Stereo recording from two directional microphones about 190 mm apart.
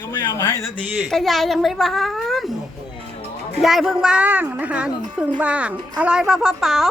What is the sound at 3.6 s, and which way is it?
A woman's voice, centre (ahead or behind).